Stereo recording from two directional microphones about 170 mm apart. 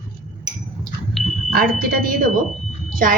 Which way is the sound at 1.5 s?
60° right (ahead or behind).